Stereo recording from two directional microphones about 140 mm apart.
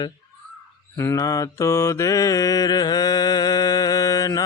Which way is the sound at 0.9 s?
20° left (ahead or behind).